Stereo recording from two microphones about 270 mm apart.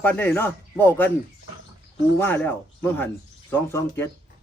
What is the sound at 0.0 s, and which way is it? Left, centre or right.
Speech, centre.